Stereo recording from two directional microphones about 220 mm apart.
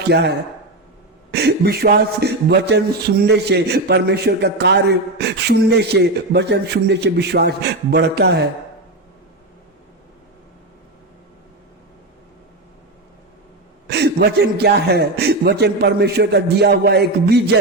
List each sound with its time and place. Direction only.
0.1 s a man's voice: 50° right (ahead or behind)
13.8 s a man's voice: 50° right (ahead or behind)